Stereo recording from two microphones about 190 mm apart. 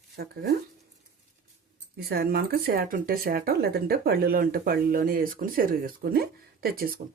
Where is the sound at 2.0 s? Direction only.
55° right (ahead or behind).